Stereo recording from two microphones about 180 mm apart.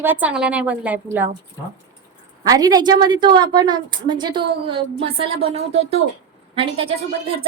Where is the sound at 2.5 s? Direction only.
20° right (ahead or behind).